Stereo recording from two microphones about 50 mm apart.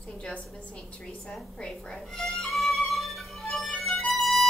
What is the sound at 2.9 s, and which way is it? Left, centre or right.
Music, centre.